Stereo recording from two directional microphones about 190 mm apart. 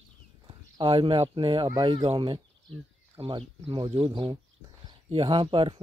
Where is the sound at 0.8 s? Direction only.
25° right (ahead or behind).